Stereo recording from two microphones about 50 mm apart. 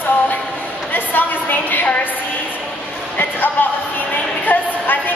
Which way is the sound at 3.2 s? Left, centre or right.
Left.